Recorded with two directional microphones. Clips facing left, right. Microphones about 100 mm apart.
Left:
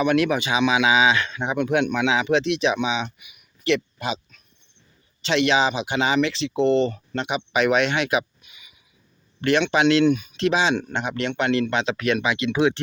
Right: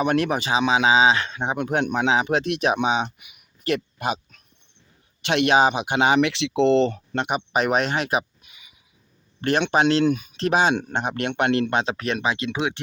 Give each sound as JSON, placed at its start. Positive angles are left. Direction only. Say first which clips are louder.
{"t": 0.0, "sound": "speech", "louder": "left 1 dB", "side_deg": -40}
{"t": 7.1, "sound": "speech", "louder": "right 1 dB", "side_deg": -50}
{"t": 10.5, "sound": "speech", "louder": "right 4 dB", "side_deg": -50}
{"t": 11.7, "sound": "speech", "louder": "left 1 dB", "side_deg": -40}
{"t": 12.5, "sound": "speech", "louder": "left 6 dB", "side_deg": -15}